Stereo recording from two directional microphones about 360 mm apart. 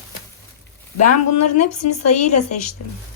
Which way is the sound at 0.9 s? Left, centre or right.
Left.